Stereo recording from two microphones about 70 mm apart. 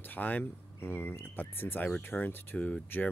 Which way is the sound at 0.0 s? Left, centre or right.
Left.